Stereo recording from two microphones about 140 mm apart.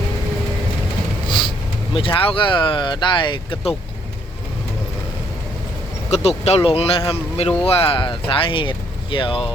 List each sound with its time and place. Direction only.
1.3 s speech: 35° left (ahead or behind)
6.1 s speech: 50° left (ahead or behind)